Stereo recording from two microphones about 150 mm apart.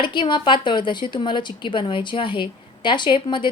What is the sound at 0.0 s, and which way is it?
A woman's voice, 30° left (ahead or behind).